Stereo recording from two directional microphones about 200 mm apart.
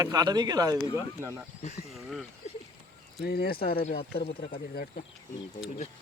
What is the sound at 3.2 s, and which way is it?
Speech, 50° left (ahead or behind).